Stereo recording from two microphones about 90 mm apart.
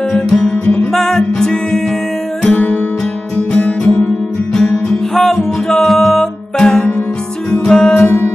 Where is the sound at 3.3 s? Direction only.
10° left (ahead or behind).